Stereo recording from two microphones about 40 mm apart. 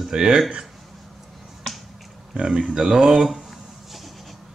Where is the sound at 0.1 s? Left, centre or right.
Centre.